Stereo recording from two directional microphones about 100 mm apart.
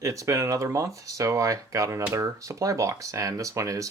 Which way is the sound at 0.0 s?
30° right (ahead or behind).